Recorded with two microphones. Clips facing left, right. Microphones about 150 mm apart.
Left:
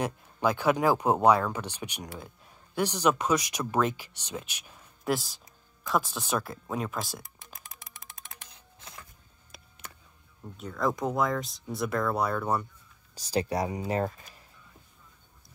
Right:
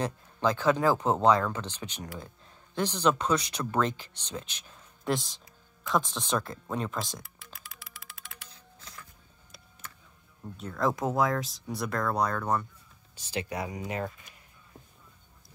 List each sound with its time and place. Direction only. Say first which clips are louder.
0.0 s speech: left 1 dB; 10° left (ahead or behind)
10.4 s speech: even; centre (ahead or behind)
13.1 s speech: left 6 dB; 40° left (ahead or behind)